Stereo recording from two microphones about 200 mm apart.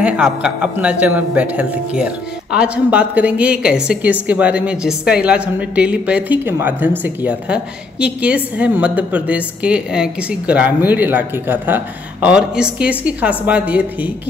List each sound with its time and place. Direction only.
0.0 s speech: 5° right (ahead or behind)